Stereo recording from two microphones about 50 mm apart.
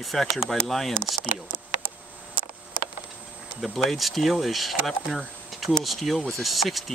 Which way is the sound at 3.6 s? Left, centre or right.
Centre.